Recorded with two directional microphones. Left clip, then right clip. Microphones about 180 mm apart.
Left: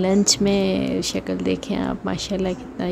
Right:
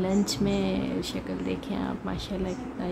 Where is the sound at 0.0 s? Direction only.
40° left (ahead or behind).